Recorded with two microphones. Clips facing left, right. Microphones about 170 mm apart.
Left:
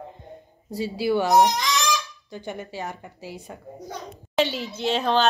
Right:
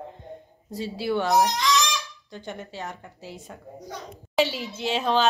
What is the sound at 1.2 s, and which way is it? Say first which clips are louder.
Speech: left 3 dB; 20° left (ahead or behind).